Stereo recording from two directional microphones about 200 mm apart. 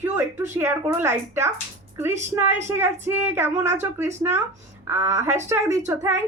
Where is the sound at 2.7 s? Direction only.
10° right (ahead or behind).